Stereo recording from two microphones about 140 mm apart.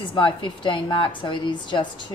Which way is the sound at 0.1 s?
35° left (ahead or behind).